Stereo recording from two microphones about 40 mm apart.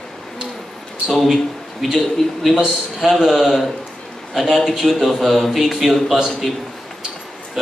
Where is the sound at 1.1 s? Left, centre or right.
Centre.